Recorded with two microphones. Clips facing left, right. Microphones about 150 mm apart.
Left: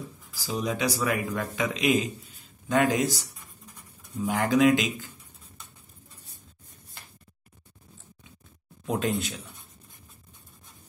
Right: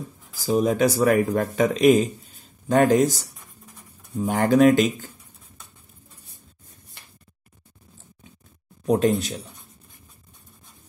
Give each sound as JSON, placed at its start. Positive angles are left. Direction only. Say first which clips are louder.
{"t": 0.5, "sound": "a man's voice", "louder": "right 9 dB", "side_deg": -45}
{"t": 8.8, "sound": "speech", "louder": "right 8 dB", "side_deg": -40}